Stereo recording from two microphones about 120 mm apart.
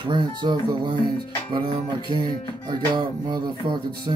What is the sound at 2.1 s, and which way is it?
Speech, 40° right (ahead or behind).